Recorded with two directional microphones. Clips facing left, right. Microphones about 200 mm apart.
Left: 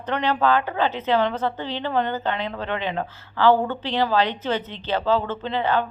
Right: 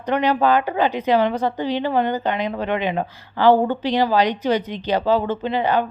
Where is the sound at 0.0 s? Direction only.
10° right (ahead or behind).